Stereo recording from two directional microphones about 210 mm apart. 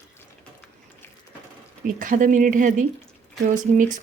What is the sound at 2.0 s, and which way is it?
Speech, 40° right (ahead or behind).